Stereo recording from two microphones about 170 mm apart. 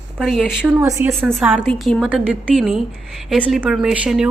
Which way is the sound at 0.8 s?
20° right (ahead or behind).